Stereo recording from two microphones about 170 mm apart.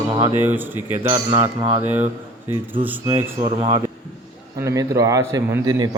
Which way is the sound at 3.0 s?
15° right (ahead or behind).